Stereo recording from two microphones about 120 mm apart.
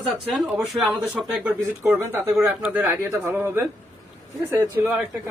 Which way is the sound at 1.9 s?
10° right (ahead or behind).